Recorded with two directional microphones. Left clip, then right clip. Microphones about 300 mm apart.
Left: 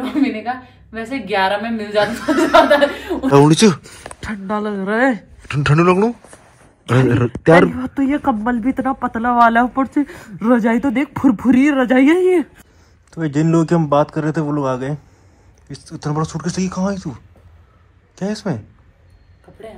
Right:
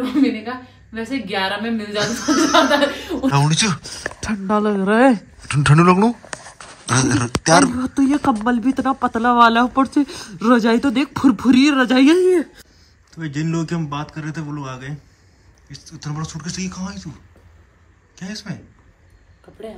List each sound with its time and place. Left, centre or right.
0.0 s a woman's voice: centre
4.3 s speech: centre
5.5 s a woman's voice: centre
13.2 s a woman's voice: centre